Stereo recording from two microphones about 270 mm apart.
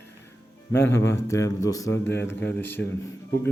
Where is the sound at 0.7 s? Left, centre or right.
Centre.